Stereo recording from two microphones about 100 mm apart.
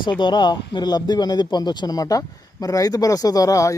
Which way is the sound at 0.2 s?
50° left (ahead or behind).